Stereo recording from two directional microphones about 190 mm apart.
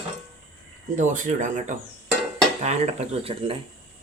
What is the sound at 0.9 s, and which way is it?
Speech, 40° right (ahead or behind).